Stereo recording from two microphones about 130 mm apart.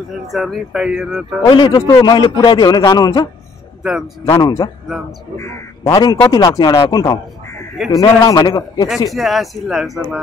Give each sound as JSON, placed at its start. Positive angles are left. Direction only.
{"t": 0.3, "sound": "speech", "side_deg": 0}
{"t": 1.5, "sound": "a man's voice", "side_deg": 30}
{"t": 4.4, "sound": "a man's voice", "side_deg": 30}
{"t": 5.4, "sound": "a man's voice", "side_deg": 20}
{"t": 5.9, "sound": "a man's voice", "side_deg": 30}
{"t": 9.1, "sound": "speech", "side_deg": 0}